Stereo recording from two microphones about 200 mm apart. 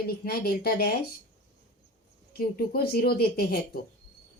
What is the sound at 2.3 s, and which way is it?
Speech, 50° left (ahead or behind).